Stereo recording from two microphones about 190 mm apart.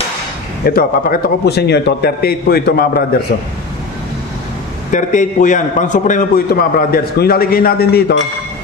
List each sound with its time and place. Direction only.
0.7 s a man's voice: 50° left (ahead or behind)
4.9 s a man's voice: 40° left (ahead or behind)